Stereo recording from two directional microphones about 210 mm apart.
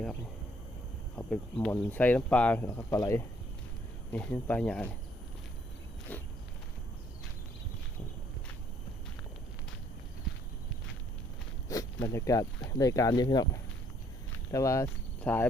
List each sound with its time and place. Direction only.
1.1 s speech: 5° left (ahead or behind)
6.1 s walk: 5° left (ahead or behind)
11.7 s speech: 15° left (ahead or behind)